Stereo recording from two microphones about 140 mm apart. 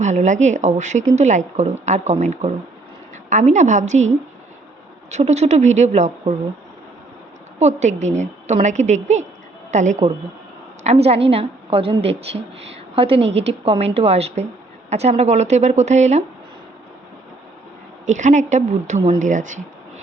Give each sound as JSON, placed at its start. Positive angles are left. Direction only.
{"t": 0.0, "sound": "speech", "side_deg": -55}
{"t": 5.1, "sound": "a woman's voice", "side_deg": -55}
{"t": 7.6, "sound": "speech", "side_deg": -55}
{"t": 10.8, "sound": "a woman's voice", "side_deg": -45}
{"t": 18.0, "sound": "speech", "side_deg": -60}